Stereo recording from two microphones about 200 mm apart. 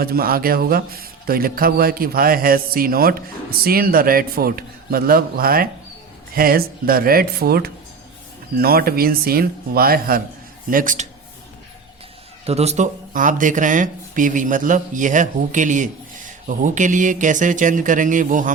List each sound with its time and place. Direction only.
0.0 s a man's voice: 50° right (ahead or behind)
12.5 s speech: 30° right (ahead or behind)